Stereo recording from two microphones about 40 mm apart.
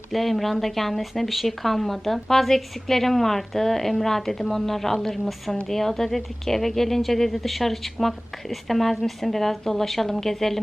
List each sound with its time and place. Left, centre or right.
0.1 s a woman's voice: centre